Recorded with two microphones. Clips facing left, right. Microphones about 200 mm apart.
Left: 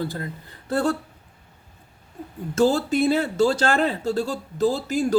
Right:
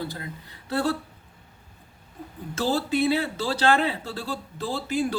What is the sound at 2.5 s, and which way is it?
Speech, 45° left (ahead or behind).